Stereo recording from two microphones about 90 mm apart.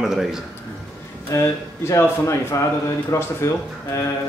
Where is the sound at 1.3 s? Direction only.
30° left (ahead or behind).